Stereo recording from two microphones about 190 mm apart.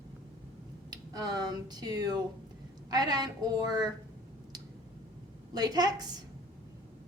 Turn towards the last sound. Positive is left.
turn(degrees=-20)  # may be behind; listen again after turning